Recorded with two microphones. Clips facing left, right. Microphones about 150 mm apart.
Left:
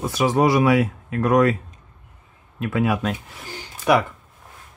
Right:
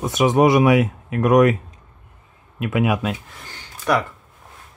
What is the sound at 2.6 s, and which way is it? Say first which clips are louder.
Speech: right 1 dB; 15° right (ahead or behind).